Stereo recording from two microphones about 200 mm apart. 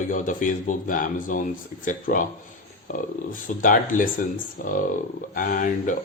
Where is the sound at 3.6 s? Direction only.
45° left (ahead or behind).